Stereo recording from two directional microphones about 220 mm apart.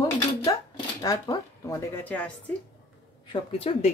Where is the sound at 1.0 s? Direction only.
15° left (ahead or behind).